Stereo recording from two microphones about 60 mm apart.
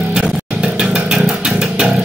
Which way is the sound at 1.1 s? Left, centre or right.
Centre.